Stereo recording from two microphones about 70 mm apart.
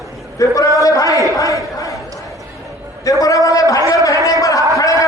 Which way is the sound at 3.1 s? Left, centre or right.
Left.